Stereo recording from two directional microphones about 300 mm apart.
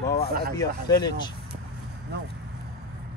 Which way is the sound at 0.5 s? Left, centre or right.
Centre.